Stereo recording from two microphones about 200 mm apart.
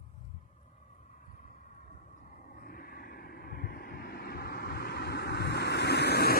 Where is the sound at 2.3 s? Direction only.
45° left (ahead or behind).